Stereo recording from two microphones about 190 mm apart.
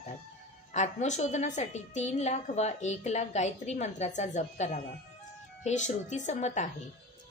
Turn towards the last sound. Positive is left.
turn(degrees=35)  # may be behind; listen again after turning